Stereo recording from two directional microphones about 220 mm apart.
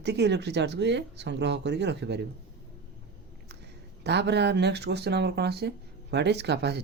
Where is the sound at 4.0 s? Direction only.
50° right (ahead or behind).